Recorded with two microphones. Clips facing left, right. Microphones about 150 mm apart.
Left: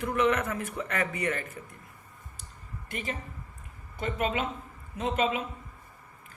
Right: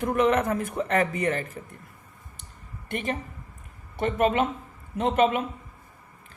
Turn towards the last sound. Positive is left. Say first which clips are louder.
# right 6 dB
turn(degrees=-55)  # may be behind; listen again after turning